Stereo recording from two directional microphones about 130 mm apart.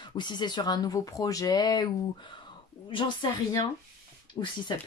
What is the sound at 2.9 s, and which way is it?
Speech, 35° left (ahead or behind).